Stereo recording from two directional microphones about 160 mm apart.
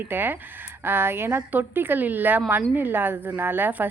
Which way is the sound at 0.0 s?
10° right (ahead or behind).